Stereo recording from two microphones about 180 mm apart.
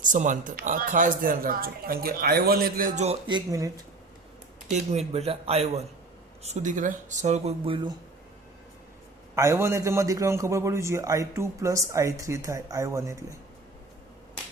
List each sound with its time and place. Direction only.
0.0 s speech: 45° right (ahead or behind)
3.2 s speech: 20° right (ahead or behind)
4.7 s speech: 35° right (ahead or behind)
9.3 s a man's voice: 15° right (ahead or behind)